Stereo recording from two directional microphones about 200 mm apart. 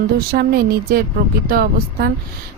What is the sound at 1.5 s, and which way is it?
Speech, 50° right (ahead or behind).